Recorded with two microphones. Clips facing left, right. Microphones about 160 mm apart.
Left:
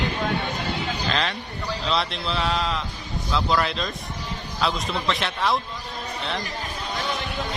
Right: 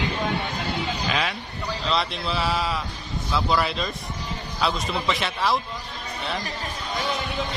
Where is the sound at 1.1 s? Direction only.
10° right (ahead or behind).